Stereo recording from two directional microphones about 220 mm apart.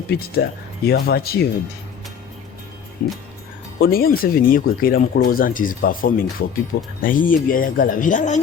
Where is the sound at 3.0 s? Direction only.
40° left (ahead or behind).